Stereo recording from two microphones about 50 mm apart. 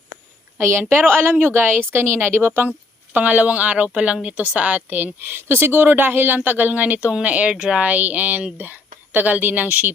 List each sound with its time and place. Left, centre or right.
0.7 s speech: right
3.1 s a woman's voice: right